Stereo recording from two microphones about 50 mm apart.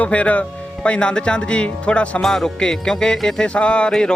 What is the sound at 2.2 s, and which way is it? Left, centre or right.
Speech, centre.